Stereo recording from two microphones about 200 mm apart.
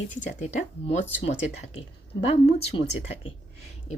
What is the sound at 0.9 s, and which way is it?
A woman's voice, 30° left (ahead or behind).